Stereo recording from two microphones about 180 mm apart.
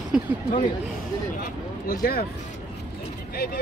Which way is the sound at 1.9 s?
55° left (ahead or behind).